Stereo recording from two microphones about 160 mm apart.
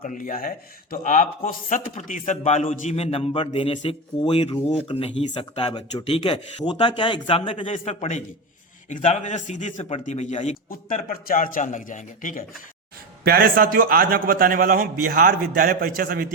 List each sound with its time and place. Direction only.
0.0 s a man's voice: 55° left (ahead or behind)
13.2 s a man's voice: 70° right (ahead or behind)